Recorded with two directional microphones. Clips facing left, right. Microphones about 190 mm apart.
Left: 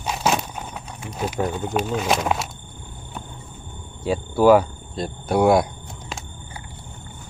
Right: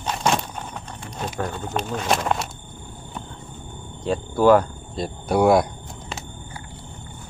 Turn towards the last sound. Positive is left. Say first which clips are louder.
# even
turn(degrees=0)  # may be behind; listen again after turning